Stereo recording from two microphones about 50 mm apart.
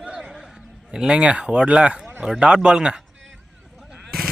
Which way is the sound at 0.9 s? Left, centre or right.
Centre.